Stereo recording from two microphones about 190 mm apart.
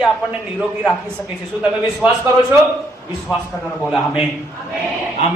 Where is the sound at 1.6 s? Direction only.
10° right (ahead or behind).